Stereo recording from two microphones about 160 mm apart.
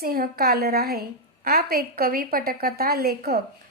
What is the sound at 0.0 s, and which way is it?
A woman's voice, 70° right (ahead or behind).